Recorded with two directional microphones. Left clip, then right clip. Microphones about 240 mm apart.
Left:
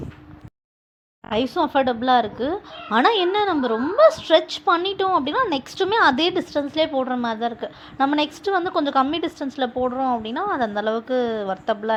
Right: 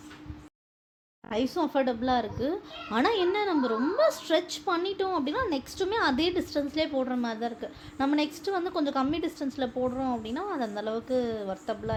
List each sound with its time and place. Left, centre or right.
1.3 s speech: centre